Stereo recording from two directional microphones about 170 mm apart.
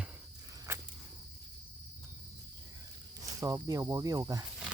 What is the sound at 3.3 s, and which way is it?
Speech, 20° right (ahead or behind).